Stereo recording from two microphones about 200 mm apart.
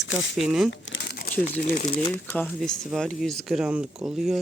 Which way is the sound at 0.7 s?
60° left (ahead or behind).